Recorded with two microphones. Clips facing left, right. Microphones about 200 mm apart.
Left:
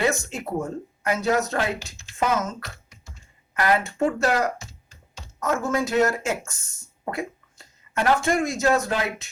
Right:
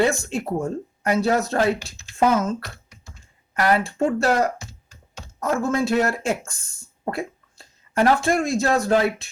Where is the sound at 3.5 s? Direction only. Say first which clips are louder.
Right 2 dB; 35° right (ahead or behind).